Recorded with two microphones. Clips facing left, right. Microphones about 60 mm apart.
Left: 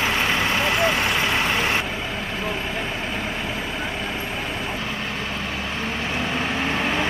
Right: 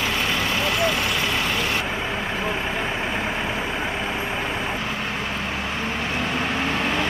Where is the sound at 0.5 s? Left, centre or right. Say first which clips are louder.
Left 1 dB; left.